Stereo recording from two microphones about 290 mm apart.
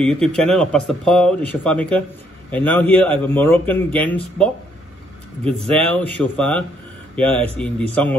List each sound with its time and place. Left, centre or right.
0.0 s speech: centre
5.4 s speech: centre
5.7 s speech: centre